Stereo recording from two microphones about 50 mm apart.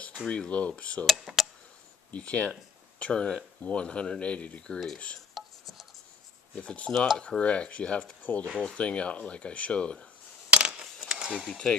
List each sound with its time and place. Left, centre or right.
0.3 s speech: left
1.2 s a sound: centre
2.0 s speech: left
5.3 s a sound: centre
6.5 s speech: left
10.5 s coin: centre
11.4 s speech: centre